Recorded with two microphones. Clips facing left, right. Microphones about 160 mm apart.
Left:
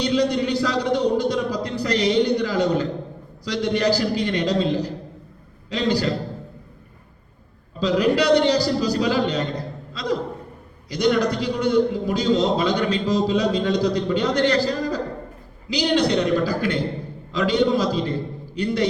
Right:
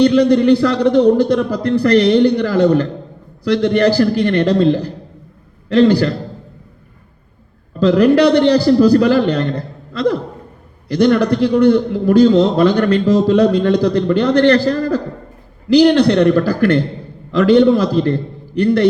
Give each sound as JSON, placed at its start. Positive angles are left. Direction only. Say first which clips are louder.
{"t": 0.0, "sound": "a man's voice", "louder": "right 10 dB", "side_deg": -60}
{"t": 7.8, "sound": "a man's voice", "louder": "right 9 dB", "side_deg": -60}